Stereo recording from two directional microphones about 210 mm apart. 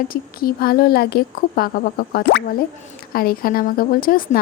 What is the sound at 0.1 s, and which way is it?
Speech, 45° left (ahead or behind).